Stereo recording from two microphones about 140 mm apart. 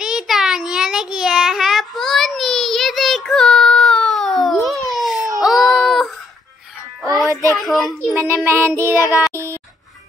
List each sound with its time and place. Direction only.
0.0 s child singing: 5° right (ahead or behind)
5.4 s a sound: centre (ahead or behind)
7.0 s music: centre (ahead or behind)
7.5 s a child's voice: centre (ahead or behind)
8.5 s child singing: 20° right (ahead or behind)
9.3 s a sound: 20° right (ahead or behind)